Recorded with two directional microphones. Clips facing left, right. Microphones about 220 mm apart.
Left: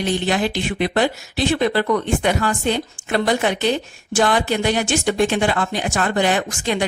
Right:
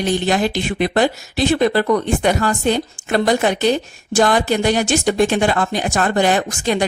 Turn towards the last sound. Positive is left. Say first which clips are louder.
# right 3 dB
turn(degrees=-40)  # may be behind; listen again after turning